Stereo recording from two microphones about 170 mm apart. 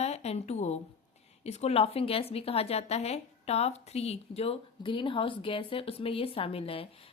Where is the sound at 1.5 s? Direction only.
40° left (ahead or behind).